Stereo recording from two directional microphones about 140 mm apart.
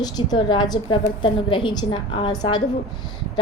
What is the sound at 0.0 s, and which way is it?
A woman's voice, 30° left (ahead or behind).